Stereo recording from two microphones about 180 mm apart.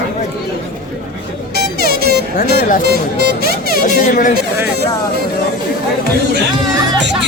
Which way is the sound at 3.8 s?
45° left (ahead or behind).